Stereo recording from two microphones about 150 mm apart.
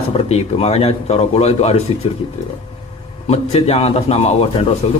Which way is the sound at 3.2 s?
45° left (ahead or behind).